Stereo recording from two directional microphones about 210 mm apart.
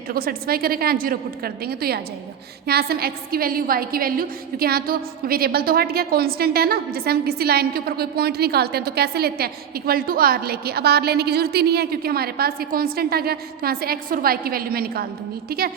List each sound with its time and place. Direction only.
0.1 s a woman's voice: 45° right (ahead or behind)